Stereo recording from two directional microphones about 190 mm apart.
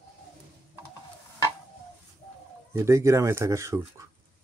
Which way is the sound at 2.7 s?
15° right (ahead or behind).